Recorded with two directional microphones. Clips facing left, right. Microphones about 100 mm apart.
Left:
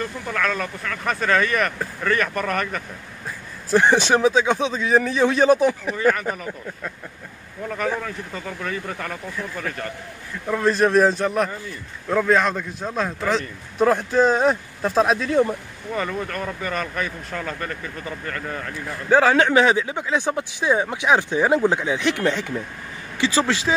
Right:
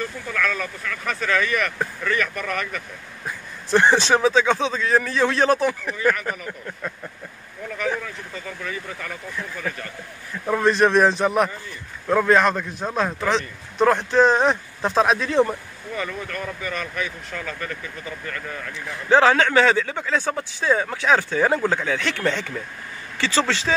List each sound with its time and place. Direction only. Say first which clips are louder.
0.3 s speech: left 2 dB; 40° left (ahead or behind)
3.7 s speech: even; 15° left (ahead or behind)
5.9 s speech: even; 35° left (ahead or behind)
8.5 s speech: left 3 dB; 40° left (ahead or behind)
10.6 s speech: even; centre (ahead or behind)
15.9 s speech: left 3 dB; 35° left (ahead or behind)
18.7 s speech: even; 5° left (ahead or behind)